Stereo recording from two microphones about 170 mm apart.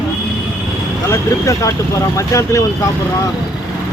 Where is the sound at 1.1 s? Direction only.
20° left (ahead or behind).